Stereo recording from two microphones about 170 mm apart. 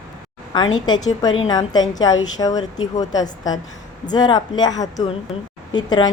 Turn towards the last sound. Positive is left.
turn(degrees=25)  # may be behind; listen again after turning